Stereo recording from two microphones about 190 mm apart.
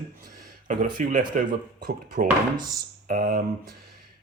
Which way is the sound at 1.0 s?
40° right (ahead or behind).